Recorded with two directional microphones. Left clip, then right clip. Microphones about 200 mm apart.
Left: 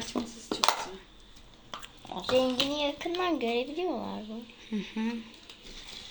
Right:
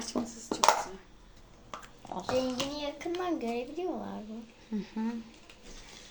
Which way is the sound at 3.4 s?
15° left (ahead or behind).